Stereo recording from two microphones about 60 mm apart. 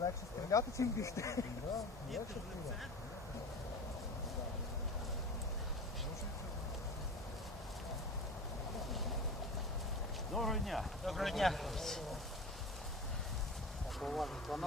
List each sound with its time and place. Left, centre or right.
0.5 s speech: left
10.3 s speech: centre
14.0 s speech: centre